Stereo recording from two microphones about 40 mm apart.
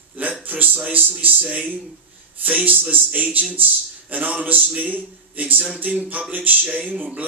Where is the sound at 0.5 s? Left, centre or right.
Right.